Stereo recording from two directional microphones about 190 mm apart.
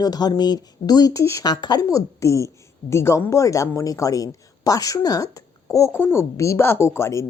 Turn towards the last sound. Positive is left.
turn(degrees=15)  # may be behind; listen again after turning